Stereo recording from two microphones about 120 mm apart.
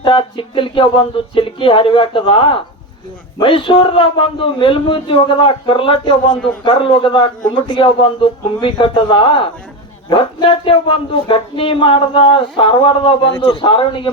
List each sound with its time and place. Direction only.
0.0 s speech: 45° left (ahead or behind)